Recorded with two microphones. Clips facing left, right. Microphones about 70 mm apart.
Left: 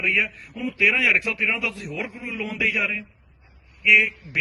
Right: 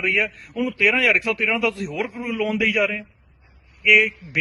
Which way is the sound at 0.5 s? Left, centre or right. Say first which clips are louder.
Right 2 dB; right.